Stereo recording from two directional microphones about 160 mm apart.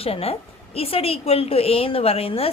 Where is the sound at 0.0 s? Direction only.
40° left (ahead or behind).